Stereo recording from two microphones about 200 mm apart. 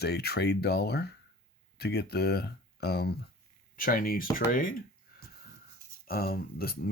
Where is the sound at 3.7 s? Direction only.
45° left (ahead or behind).